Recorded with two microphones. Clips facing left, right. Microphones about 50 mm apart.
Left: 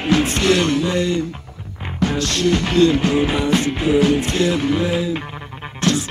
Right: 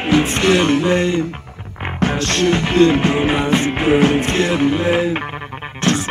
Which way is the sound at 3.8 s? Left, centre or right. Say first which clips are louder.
Right 2 dB; right.